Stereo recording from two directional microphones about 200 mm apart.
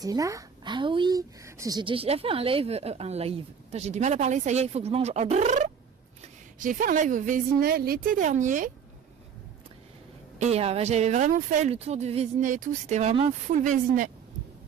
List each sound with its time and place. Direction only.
0.0 s speech: 15° right (ahead or behind); by 8.7 s 40° right (ahead or behind)
10.3 s speech: 35° right (ahead or behind)